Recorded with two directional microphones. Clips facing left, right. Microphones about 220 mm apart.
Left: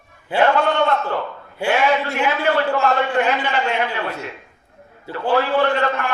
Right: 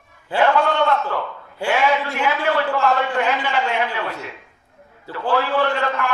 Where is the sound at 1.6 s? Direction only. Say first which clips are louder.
Left 1 dB; 25° left (ahead or behind).